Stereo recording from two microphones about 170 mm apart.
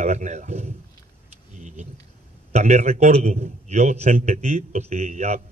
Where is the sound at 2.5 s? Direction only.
40° right (ahead or behind).